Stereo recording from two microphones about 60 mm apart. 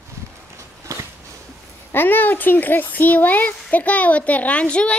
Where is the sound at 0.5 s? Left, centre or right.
Right.